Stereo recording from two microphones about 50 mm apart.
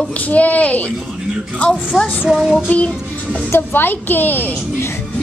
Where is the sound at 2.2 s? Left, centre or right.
Centre.